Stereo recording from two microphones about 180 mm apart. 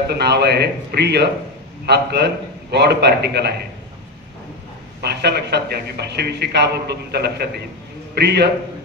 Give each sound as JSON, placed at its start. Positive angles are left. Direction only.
{"t": 0.1, "sound": "a man's voice", "side_deg": -65}
{"t": 5.2, "sound": "a man's voice", "side_deg": -65}